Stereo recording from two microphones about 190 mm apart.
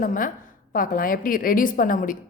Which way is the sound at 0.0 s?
45° left (ahead or behind).